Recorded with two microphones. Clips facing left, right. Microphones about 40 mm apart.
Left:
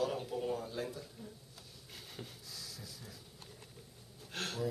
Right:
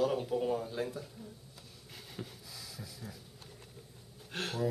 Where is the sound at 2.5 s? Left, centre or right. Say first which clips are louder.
Right 2 dB; centre.